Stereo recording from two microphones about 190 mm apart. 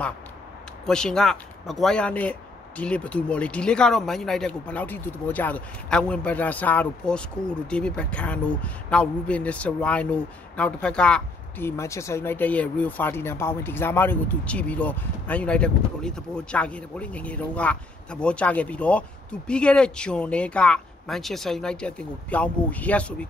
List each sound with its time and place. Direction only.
0.8 s speech: 5° left (ahead or behind)